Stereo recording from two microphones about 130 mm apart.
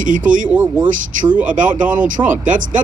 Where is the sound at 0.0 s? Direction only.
90° right.